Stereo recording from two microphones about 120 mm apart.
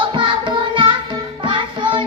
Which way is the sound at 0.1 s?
40° right (ahead or behind).